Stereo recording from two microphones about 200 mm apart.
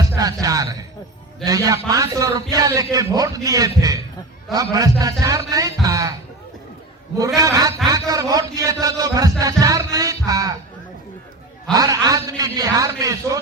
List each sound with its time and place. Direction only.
0.4 s a sound: 15° right (ahead or behind)
1.5 s a man's voice: 15° right (ahead or behind)
7.3 s a man's voice: 15° right (ahead or behind)
11.7 s a man's voice: 20° right (ahead or behind)